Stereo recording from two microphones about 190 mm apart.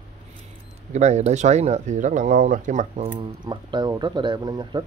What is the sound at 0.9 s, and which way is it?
Speech, 35° right (ahead or behind).